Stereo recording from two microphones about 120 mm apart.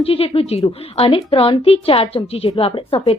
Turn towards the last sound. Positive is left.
turn(degrees=50)  # may be behind; listen again after turning